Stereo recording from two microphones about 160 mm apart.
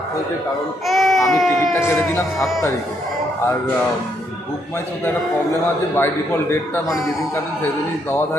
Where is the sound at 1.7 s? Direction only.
15° left (ahead or behind).